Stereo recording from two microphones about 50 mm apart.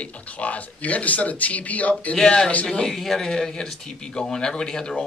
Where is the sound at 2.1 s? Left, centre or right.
Centre.